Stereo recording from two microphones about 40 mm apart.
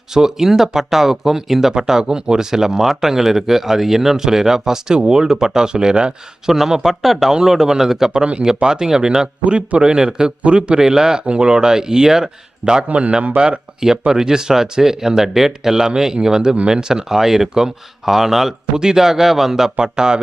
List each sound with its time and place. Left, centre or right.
0.1 s speech: centre
6.5 s speech: centre
8.2 s a man's voice: right
10.8 s a man's voice: centre
19.8 s speech: centre